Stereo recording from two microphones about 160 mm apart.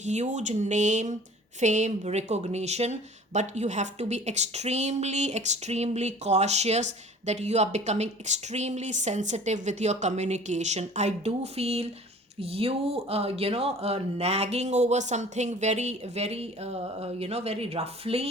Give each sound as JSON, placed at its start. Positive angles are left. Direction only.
{"t": 0.0, "sound": "speech", "side_deg": -45}